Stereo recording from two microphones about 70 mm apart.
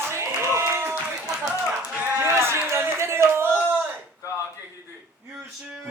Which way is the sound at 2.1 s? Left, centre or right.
Right.